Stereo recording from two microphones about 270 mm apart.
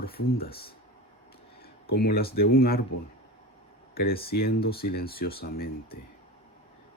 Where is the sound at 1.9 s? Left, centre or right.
Left.